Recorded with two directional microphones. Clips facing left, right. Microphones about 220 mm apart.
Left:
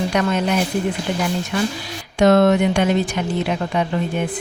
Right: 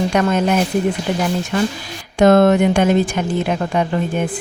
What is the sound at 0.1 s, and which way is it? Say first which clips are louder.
Speech: right 3 dB; 45° right (ahead or behind).